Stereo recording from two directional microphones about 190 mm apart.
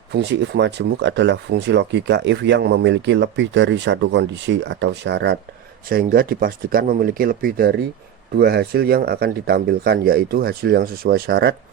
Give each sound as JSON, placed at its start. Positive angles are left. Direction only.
{"t": 0.1, "sound": "speech", "side_deg": -65}
{"t": 5.9, "sound": "speech", "side_deg": -50}